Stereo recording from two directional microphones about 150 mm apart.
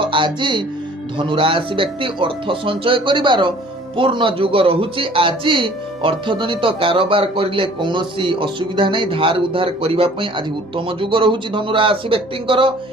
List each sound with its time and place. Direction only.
0.0 s a man's voice: 35° right (ahead or behind)